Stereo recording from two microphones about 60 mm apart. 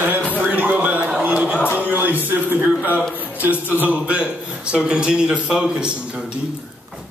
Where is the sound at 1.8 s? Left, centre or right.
Right.